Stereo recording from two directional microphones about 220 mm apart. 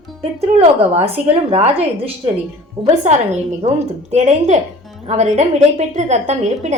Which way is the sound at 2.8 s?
30° right (ahead or behind).